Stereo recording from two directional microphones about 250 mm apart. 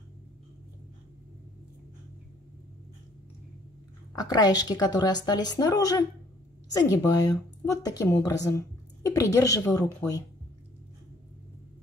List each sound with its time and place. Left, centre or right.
4.1 s a woman's voice: centre